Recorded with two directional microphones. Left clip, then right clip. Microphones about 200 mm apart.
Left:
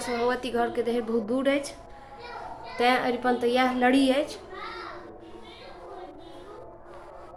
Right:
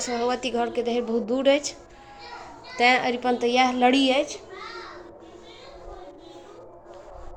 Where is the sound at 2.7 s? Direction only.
15° right (ahead or behind).